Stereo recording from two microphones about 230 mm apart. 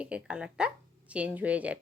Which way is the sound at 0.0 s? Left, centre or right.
Centre.